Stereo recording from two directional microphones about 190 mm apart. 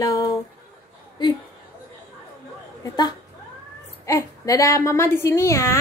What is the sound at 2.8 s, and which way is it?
A woman's voice, 20° left (ahead or behind).